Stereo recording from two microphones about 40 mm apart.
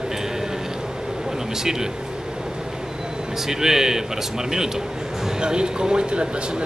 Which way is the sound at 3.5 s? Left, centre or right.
Centre.